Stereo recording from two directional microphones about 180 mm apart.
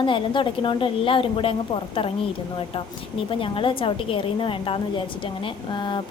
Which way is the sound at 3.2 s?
30° left (ahead or behind).